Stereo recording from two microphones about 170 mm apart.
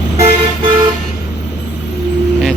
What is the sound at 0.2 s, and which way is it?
Vehicle, 35° right (ahead or behind).